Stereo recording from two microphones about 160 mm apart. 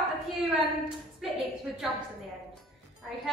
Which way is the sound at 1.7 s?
Centre (ahead or behind).